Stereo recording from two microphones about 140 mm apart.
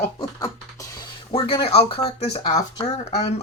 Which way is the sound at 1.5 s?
40° left (ahead or behind).